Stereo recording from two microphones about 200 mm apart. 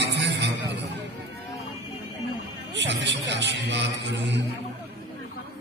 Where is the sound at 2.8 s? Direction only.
60° right (ahead or behind).